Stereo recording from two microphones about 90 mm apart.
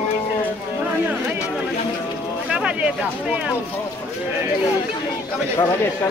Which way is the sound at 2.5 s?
10° right (ahead or behind).